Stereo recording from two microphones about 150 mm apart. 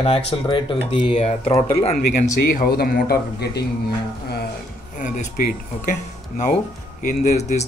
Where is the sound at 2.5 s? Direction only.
85° left.